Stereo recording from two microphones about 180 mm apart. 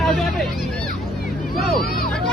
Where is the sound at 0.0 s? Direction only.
Centre (ahead or behind).